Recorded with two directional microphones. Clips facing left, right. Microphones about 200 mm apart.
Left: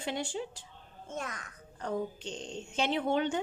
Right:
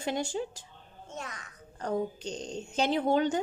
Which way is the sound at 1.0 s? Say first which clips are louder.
Left 2 dB; 50° left (ahead or behind).